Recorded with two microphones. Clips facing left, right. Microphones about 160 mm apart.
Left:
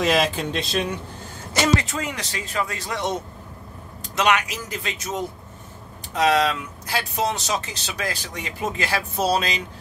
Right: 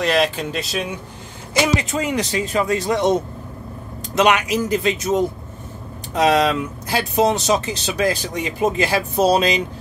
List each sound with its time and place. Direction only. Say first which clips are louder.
0.0 s speech: right 2 dB; centre (ahead or behind)
1.8 s speech: right 7 dB; 15° right (ahead or behind)
6.1 s speech: right 4 dB; 20° right (ahead or behind)